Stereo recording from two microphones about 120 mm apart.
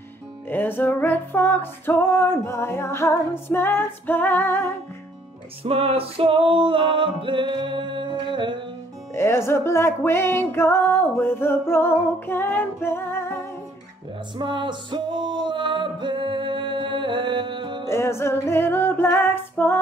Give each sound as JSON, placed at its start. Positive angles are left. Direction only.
{"t": 0.5, "sound": "music", "side_deg": 15}
{"t": 5.6, "sound": "music", "side_deg": -50}
{"t": 9.1, "sound": "music", "side_deg": 20}
{"t": 14.3, "sound": "music", "side_deg": -40}
{"t": 17.8, "sound": "music", "side_deg": 20}